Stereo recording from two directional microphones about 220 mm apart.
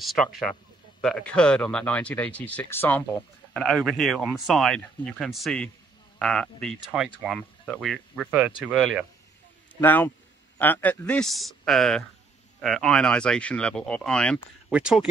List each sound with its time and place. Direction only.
0.0 s speech: centre (ahead or behind)
9.8 s a man's voice: 10° left (ahead or behind)